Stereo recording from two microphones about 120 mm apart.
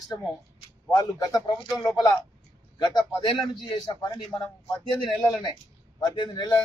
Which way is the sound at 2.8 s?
40° left (ahead or behind).